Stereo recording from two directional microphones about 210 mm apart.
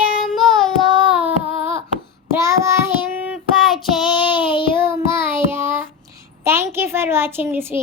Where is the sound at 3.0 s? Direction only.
5° right (ahead or behind).